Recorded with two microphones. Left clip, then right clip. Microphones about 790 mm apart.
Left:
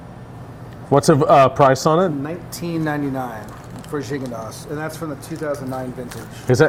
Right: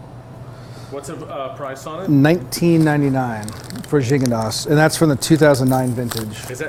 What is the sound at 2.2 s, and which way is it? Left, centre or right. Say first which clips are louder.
Speech: right 12 dB; right.